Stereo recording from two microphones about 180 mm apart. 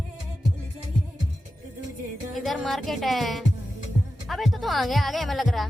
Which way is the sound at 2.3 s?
Centre (ahead or behind).